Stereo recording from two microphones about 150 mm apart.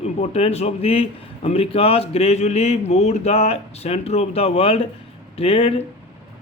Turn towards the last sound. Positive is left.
turn(degrees=40)  # may be behind; listen again after turning